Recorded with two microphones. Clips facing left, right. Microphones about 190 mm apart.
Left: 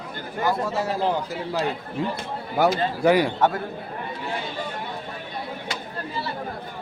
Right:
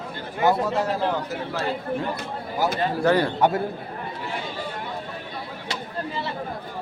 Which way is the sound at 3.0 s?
10° left (ahead or behind).